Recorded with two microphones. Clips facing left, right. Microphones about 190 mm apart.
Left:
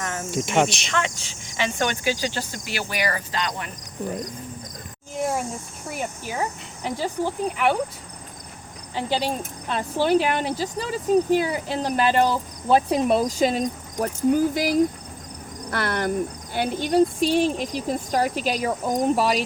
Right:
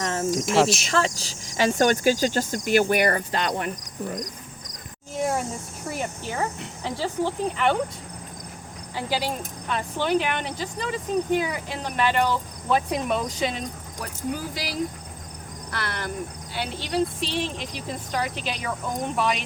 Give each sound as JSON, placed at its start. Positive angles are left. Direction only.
{"t": 0.0, "sound": "cricket", "side_deg": -30}
{"t": 0.3, "sound": "speech", "side_deg": 0}
{"t": 0.9, "sound": "speech", "side_deg": -35}
{"t": 5.9, "sound": "speech", "side_deg": 5}
{"t": 9.0, "sound": "speech", "side_deg": 25}
{"t": 9.6, "sound": "speech", "side_deg": 35}
{"t": 15.7, "sound": "cricket", "side_deg": 50}
{"t": 17.7, "sound": "speech", "side_deg": 45}